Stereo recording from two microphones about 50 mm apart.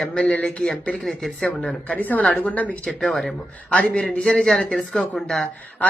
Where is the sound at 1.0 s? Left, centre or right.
Centre.